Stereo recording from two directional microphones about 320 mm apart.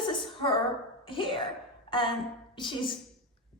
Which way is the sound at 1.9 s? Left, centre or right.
Centre.